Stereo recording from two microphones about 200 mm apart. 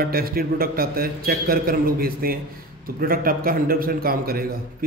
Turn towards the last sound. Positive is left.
turn(degrees=-50)  # may be behind; listen again after turning